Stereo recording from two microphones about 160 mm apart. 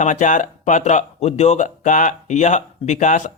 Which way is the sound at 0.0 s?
50° left (ahead or behind).